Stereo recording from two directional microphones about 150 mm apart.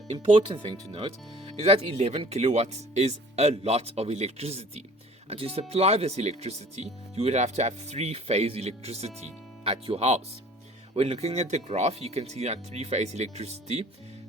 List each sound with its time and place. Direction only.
0.4 s speech: 35° right (ahead or behind)